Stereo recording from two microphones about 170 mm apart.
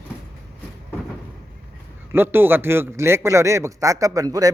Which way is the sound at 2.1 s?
15° right (ahead or behind).